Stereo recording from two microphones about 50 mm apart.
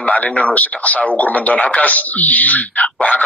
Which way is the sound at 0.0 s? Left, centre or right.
Left.